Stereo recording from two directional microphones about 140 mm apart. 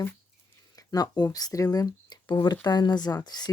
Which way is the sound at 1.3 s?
25° left (ahead or behind).